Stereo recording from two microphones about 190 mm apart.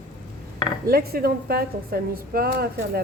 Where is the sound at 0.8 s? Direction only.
55° right (ahead or behind).